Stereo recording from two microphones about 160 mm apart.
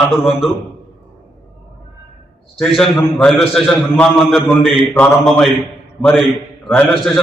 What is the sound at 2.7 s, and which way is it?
A man's voice, centre (ahead or behind).